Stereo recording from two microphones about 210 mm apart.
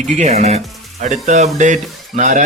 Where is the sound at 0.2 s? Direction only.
30° right (ahead or behind).